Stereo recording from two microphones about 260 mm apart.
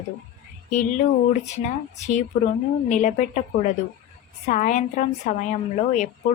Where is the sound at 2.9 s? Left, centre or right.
Left.